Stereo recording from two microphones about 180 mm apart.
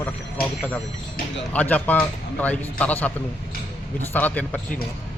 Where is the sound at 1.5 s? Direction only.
10° left (ahead or behind).